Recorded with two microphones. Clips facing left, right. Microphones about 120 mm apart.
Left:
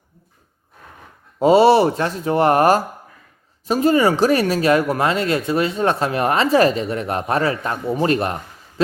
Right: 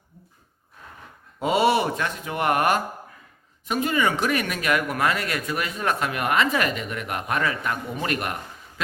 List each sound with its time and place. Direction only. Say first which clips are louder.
1.4 s speech: left 9 dB; 30° left (ahead or behind)